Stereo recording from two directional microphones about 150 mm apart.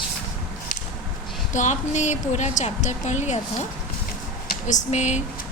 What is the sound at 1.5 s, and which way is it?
A woman's voice, 50° left (ahead or behind).